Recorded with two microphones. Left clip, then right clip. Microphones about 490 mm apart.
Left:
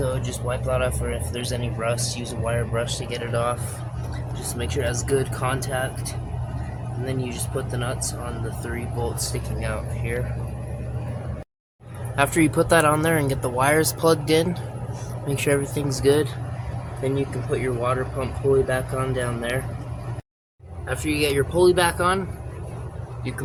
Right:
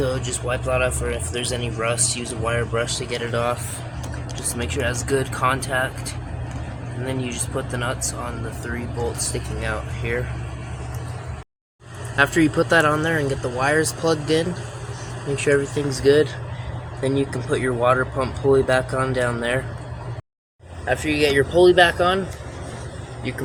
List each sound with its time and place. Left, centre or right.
0.1 s speech: left
7.1 s speech: left
9.6 s speech: left
12.1 s speech: left
17.0 s speech: left
20.9 s speech: left